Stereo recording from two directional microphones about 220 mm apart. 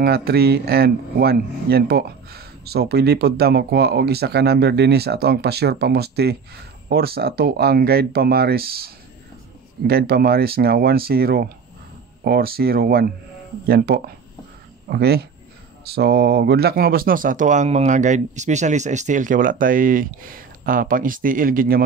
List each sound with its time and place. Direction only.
0.0 s speech: 45° right (ahead or behind)